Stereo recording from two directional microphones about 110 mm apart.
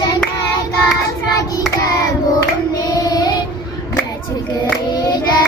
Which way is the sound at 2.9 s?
35° left (ahead or behind).